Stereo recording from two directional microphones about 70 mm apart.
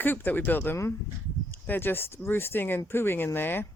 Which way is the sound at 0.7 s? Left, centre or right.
Left.